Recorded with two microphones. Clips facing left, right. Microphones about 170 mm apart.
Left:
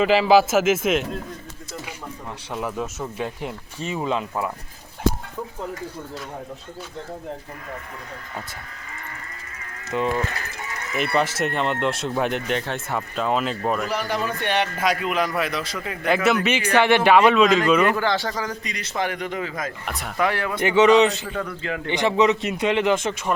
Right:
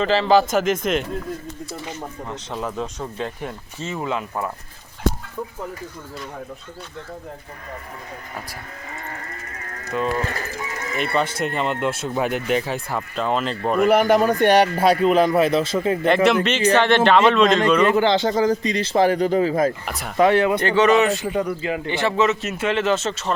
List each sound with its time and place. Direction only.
0.0 s speech: 10° left (ahead or behind)
2.5 s speech: 10° left (ahead or behind)
9.8 s speech: 20° left (ahead or behind)
11.0 s speech: 5° left (ahead or behind)
13.8 s speech: 55° right (ahead or behind); by 16.0 s 30° right (ahead or behind)
16.0 s speech: 5° left (ahead or behind)
17.8 s speech: 20° right (ahead or behind)
19.8 s speech: centre (ahead or behind)
20.1 s speech: 25° right (ahead or behind)
20.6 s speech: 15° left (ahead or behind)
21.2 s speech: 15° right (ahead or behind)
21.8 s speech: 15° left (ahead or behind)